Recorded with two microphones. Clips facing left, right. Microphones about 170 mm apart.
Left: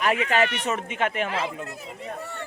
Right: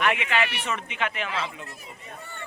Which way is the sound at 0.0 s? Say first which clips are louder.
Left 3 dB; 40° left (ahead or behind).